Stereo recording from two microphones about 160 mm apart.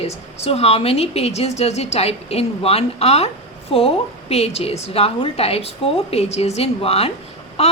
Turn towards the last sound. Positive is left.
turn(degrees=40)  # may be behind; listen again after turning